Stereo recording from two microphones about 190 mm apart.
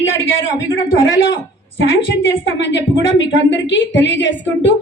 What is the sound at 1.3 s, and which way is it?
A woman's voice, 70° left (ahead or behind).